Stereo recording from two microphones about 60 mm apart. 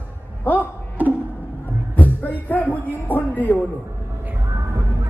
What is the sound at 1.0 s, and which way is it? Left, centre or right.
Music, right.